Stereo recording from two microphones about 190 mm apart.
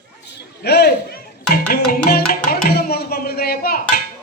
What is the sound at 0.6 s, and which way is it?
Music, 60° left (ahead or behind).